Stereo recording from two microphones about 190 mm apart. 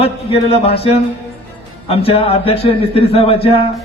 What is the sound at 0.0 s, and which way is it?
Speech, 30° left (ahead or behind).